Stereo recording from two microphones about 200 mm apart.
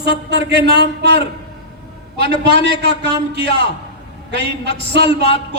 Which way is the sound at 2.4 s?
55° right (ahead or behind).